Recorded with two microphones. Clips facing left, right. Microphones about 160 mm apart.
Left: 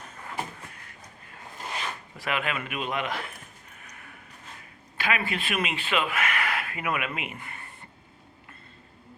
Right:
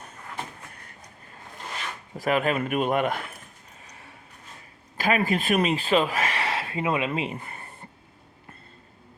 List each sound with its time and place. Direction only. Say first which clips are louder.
2.1 s speech: right 8 dB; 40° right (ahead or behind)
3.8 s a sound: right 1 dB; 30° right (ahead or behind)
4.9 s speech: right 6 dB; 40° right (ahead or behind)